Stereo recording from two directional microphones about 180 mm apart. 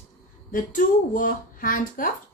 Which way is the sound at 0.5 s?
50° left (ahead or behind).